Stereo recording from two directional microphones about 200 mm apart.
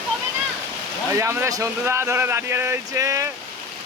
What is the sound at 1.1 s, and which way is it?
A man's voice, 15° right (ahead or behind).